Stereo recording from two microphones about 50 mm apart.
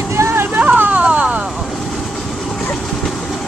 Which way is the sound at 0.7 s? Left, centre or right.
Right.